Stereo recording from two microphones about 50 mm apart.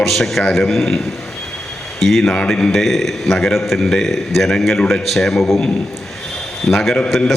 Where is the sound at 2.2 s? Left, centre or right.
Centre.